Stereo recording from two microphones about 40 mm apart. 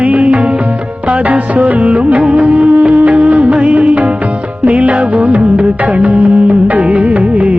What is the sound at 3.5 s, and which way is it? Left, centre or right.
Music, right.